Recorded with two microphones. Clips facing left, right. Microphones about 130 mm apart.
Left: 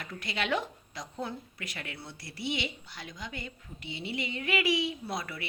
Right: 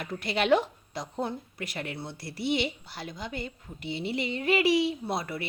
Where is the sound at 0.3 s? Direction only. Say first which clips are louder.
Right 8 dB; 30° right (ahead or behind).